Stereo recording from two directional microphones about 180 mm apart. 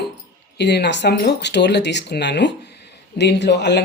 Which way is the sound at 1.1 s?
65° left (ahead or behind).